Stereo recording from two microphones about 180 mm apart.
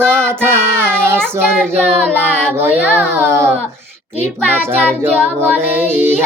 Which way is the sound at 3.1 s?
15° right (ahead or behind).